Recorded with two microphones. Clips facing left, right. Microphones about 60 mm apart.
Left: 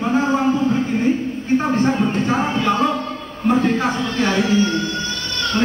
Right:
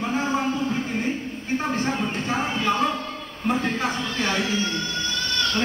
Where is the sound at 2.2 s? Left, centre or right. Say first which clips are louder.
Left 6 dB; centre.